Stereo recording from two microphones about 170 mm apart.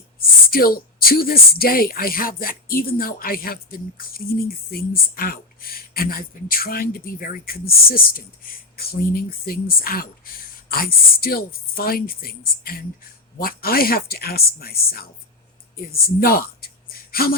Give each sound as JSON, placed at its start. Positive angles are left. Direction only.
{"t": 0.5, "sound": "speech", "side_deg": 60}